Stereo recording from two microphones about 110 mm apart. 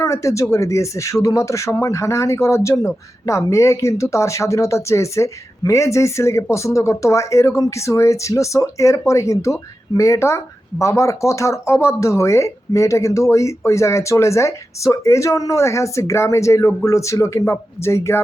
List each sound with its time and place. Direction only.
0.0 s speech: 25° left (ahead or behind)